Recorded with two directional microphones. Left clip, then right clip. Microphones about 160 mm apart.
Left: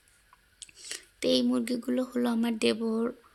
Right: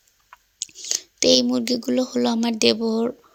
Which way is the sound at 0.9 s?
30° right (ahead or behind).